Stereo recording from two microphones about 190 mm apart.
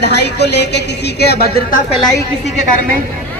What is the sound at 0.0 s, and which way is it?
A woman's voice, 60° left (ahead or behind).